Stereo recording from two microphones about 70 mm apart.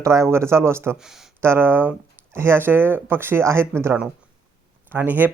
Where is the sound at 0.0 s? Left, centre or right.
Right.